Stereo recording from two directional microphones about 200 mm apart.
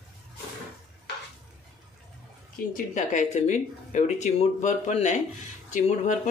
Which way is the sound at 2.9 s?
35° left (ahead or behind).